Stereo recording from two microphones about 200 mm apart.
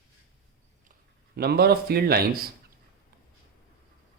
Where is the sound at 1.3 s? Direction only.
50° right (ahead or behind).